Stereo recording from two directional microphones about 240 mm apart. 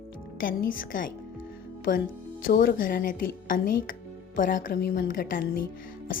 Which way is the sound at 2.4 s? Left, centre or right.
Left.